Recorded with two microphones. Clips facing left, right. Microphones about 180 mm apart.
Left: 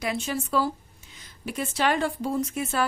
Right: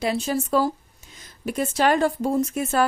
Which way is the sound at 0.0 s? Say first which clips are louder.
Right 5 dB; 35° right (ahead or behind).